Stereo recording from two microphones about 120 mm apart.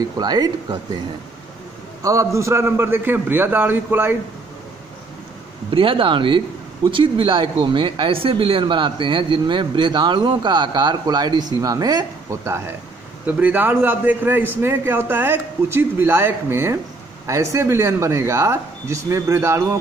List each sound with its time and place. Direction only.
0.0 s speech: 35° right (ahead or behind)
2.0 s a man's voice: 25° right (ahead or behind)
5.7 s a man's voice: 45° right (ahead or behind); by 19.8 s 20° right (ahead or behind)